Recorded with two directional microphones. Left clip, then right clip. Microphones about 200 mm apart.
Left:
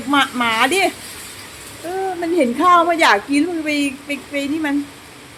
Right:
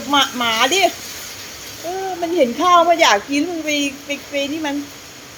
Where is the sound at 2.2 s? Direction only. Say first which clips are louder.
Even; 15° left (ahead or behind).